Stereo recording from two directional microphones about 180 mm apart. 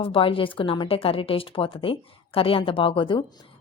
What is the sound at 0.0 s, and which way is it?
Speech, 30° left (ahead or behind).